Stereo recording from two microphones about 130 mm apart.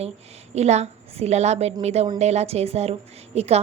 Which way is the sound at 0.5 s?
60° right (ahead or behind).